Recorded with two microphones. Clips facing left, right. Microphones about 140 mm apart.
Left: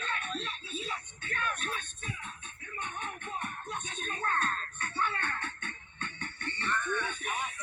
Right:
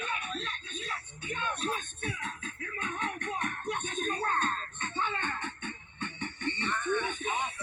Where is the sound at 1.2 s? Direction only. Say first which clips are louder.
Right 3 dB; 20° right (ahead or behind).